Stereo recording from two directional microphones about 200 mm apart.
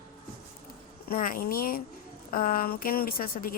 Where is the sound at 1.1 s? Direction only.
45° left (ahead or behind).